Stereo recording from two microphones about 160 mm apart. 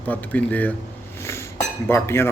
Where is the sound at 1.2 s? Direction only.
15° left (ahead or behind).